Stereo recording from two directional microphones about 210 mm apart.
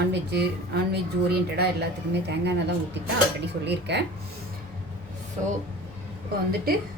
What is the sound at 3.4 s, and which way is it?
Speech, 55° right (ahead or behind).